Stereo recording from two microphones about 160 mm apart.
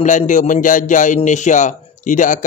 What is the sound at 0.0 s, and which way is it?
A man's voice, 50° left (ahead or behind).